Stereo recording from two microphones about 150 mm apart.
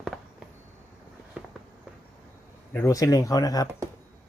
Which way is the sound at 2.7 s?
20° left (ahead or behind).